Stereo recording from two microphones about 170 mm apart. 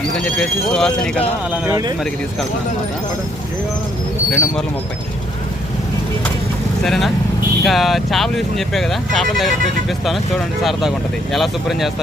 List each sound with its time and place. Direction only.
0.3 s speech: 5° left (ahead or behind)
1.6 s speech: 15° right (ahead or behind)
4.3 s speech: 5° left (ahead or behind)
6.8 s speech: centre (ahead or behind)
10.6 s speech: centre (ahead or behind)